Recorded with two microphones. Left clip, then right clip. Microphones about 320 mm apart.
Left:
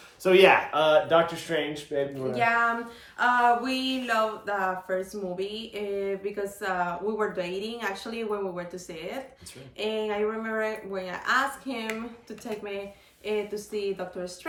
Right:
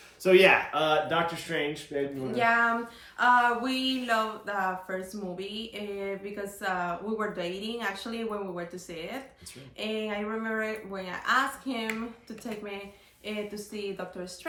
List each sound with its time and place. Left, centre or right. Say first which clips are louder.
0.2 s speech: left 2 dB; centre
13.2 s speech: left 6 dB; centre